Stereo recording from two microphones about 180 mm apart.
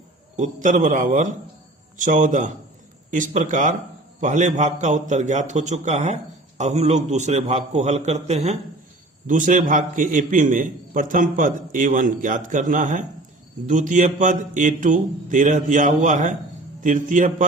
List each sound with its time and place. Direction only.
0.3 s a man's voice: 45° right (ahead or behind)